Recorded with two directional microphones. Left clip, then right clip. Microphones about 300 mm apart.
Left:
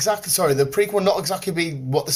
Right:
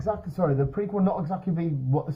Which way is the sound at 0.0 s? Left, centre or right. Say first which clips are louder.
Left 7 dB; left.